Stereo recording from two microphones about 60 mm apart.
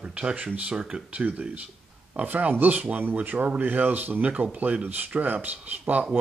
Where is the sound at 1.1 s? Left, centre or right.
Right.